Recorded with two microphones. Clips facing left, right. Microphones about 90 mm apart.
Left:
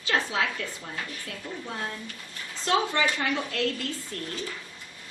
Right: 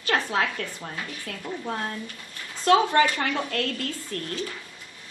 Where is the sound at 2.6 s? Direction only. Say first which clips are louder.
Right 6 dB; 50° right (ahead or behind).